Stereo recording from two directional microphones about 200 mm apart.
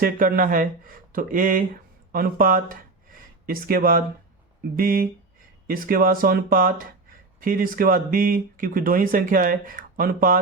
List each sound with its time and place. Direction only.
0.0 s speech: 45° right (ahead or behind)